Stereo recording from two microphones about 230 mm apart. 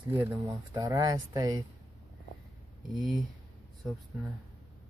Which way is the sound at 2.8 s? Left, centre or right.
Centre.